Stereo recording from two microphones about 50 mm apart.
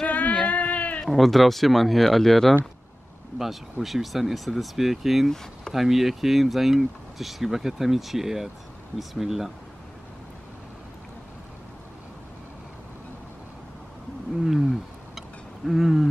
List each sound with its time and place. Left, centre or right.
0.0 s a sound: left
0.5 s sheep: left
1.0 s speech: centre
3.8 s speech: centre
14.4 s wild animals: centre